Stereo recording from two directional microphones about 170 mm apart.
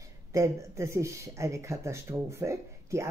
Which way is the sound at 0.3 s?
20° right (ahead or behind).